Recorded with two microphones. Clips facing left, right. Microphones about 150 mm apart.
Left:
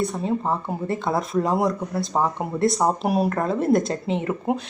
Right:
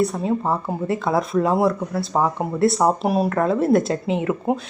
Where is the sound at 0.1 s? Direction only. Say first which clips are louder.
Right 2 dB; 5° right (ahead or behind).